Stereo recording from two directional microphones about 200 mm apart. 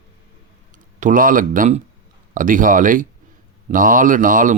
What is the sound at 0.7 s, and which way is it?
Speech, 40° right (ahead or behind).